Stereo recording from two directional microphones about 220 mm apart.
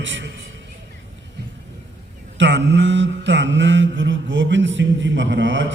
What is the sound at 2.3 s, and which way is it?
Mantra, 55° right (ahead or behind).